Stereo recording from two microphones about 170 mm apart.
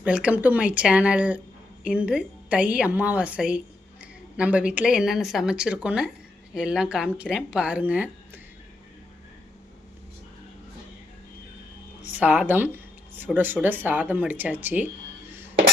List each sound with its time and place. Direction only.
0.0 s speech: 5° right (ahead or behind)
12.1 s speech: 10° right (ahead or behind)